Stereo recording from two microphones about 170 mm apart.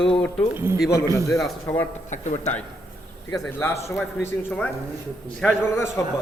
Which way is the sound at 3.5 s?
15° left (ahead or behind).